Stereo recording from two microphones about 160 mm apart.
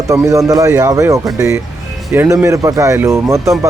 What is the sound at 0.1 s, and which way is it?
A man's voice, 20° right (ahead or behind).